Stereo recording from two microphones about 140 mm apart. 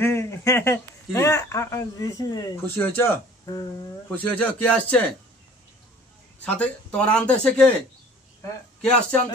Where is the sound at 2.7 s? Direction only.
15° left (ahead or behind).